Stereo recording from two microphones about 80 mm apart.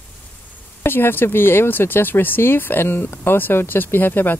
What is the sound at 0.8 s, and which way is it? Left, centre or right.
Speech, left.